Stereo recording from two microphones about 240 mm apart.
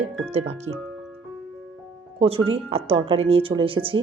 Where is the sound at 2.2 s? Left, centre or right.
Right.